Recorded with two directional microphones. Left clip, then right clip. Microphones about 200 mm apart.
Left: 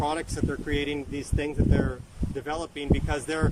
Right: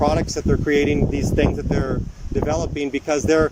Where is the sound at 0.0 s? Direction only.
35° right (ahead or behind).